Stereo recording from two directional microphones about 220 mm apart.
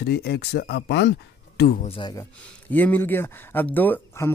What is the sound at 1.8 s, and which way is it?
Speech, 20° left (ahead or behind).